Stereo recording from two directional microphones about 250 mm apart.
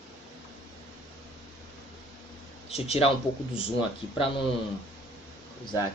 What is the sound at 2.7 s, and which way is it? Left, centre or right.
Speech, left.